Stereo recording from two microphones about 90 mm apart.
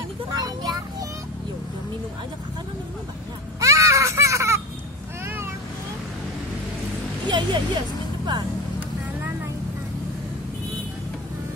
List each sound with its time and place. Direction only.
0.3 s vehicle: 45° right (ahead or behind)
3.6 s baby cry: 35° right (ahead or behind)
5.2 s vehicle: 30° right (ahead or behind)
7.2 s a sound: 60° right (ahead or behind)